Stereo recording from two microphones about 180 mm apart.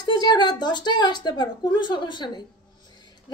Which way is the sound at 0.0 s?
20° left (ahead or behind).